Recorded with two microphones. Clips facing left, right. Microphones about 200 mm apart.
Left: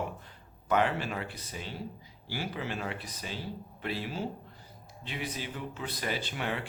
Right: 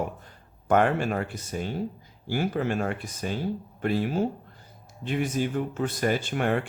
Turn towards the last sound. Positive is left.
turn(degrees=-50)  # may be behind; listen again after turning